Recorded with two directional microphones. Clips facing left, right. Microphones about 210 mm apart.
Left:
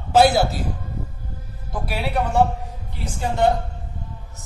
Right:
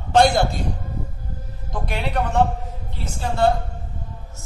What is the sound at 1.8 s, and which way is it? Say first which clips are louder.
Speech: left 1 dB; 5° left (ahead or behind).